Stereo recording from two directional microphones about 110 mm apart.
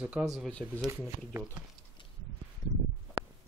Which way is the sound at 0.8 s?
25° right (ahead or behind).